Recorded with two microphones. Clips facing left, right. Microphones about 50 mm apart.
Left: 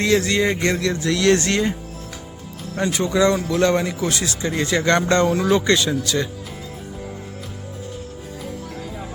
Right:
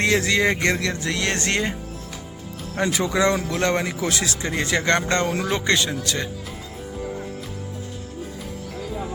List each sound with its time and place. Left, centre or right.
0.0 s speech: right
0.3 s speech: right
1.0 s speech: right
2.8 s speech: right
3.5 s speech: right
4.4 s speech: right
4.9 s speech: right